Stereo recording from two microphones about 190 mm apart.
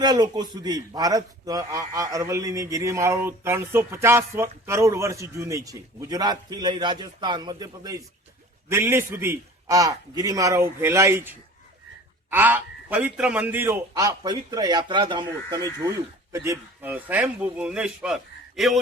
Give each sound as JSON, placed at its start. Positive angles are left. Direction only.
{"t": 0.0, "sound": "speech", "side_deg": -20}